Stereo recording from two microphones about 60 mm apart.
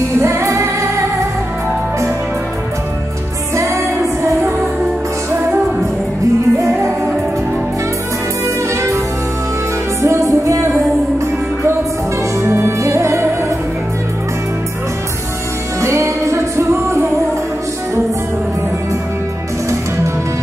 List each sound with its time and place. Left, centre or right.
0.2 s music: right
3.5 s music: right
10.0 s music: right
12.4 s music: right
15.8 s music: right